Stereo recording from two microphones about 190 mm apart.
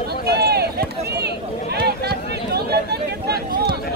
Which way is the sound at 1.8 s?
55° right (ahead or behind).